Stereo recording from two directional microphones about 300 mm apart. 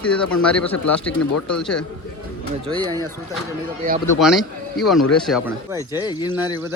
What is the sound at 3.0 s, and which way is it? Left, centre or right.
A man's voice, centre.